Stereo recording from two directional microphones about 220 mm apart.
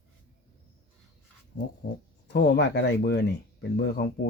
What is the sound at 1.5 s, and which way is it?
Speech, 50° left (ahead or behind).